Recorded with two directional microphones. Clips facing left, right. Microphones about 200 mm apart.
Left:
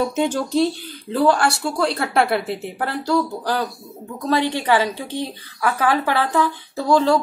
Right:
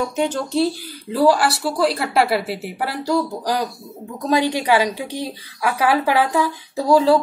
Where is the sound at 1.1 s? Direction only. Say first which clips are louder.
Right 1 dB; 5° right (ahead or behind).